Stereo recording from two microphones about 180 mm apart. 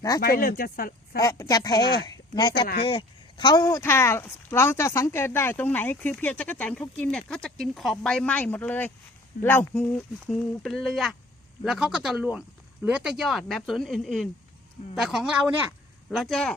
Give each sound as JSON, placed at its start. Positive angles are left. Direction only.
{"t": 0.2, "sound": "speech", "side_deg": 55}
{"t": 1.2, "sound": "speech", "side_deg": 20}